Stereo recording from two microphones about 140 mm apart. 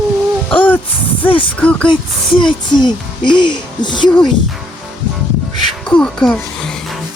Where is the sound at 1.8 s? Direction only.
35° left (ahead or behind).